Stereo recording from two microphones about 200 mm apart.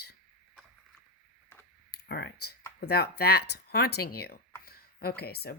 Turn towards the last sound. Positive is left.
turn(degrees=50)  # may be behind; listen again after turning